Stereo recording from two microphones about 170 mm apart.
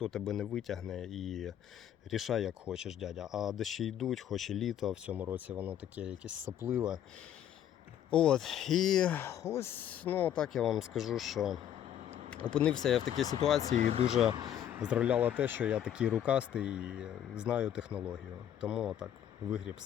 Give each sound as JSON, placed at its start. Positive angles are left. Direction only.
{"t": 0.0, "sound": "speech", "side_deg": 0}
{"t": 8.1, "sound": "speech", "side_deg": 5}
{"t": 13.7, "sound": "speech", "side_deg": -40}
{"t": 14.1, "sound": "speech", "side_deg": -5}
{"t": 14.4, "sound": "a sound", "side_deg": 0}
{"t": 14.7, "sound": "speech", "side_deg": -10}